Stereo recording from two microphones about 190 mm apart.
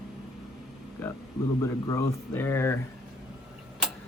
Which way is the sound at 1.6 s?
15° left (ahead or behind).